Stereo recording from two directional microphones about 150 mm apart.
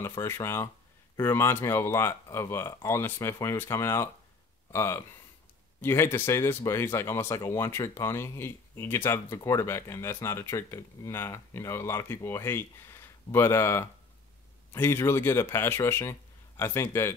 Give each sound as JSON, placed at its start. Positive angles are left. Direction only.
{"t": 0.0, "sound": "speech", "side_deg": 20}